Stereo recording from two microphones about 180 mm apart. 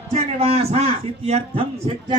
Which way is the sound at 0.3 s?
35° right (ahead or behind).